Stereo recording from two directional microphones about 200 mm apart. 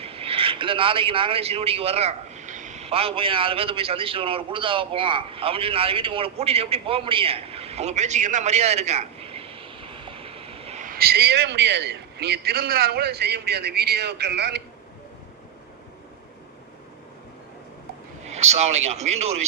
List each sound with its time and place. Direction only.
0.0 s a man's voice: 30° right (ahead or behind); by 14.6 s 55° right (ahead or behind)
18.2 s a man's voice: 35° right (ahead or behind)